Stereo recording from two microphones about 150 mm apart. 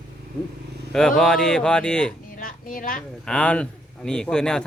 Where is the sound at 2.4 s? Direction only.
70° left (ahead or behind).